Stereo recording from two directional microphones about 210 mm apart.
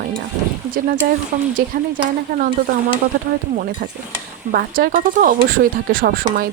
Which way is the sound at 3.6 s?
45° right (ahead or behind).